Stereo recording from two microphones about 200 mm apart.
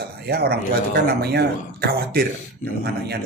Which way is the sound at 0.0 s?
50° right (ahead or behind).